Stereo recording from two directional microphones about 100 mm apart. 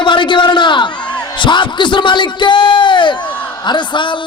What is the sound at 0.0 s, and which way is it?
Crowd, 50° left (ahead or behind).